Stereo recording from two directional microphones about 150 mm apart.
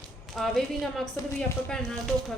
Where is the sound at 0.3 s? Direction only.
Centre (ahead or behind).